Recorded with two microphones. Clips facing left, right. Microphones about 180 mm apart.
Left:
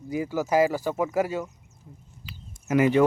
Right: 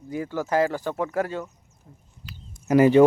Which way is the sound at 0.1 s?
10° left (ahead or behind).